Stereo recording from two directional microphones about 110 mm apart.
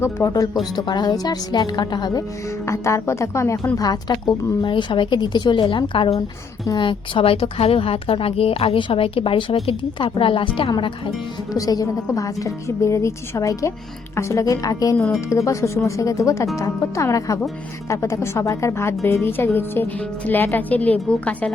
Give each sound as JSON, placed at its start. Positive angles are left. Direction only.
{"t": 0.0, "sound": "a woman's voice", "side_deg": 30}
{"t": 0.6, "sound": "a woman's voice", "side_deg": 40}
{"t": 2.6, "sound": "a woman's voice", "side_deg": 25}
{"t": 3.8, "sound": "a woman's voice", "side_deg": 40}
{"t": 11.5, "sound": "a woman's voice", "side_deg": 30}
{"t": 14.9, "sound": "speech", "side_deg": 5}
{"t": 15.3, "sound": "a woman's voice", "side_deg": 25}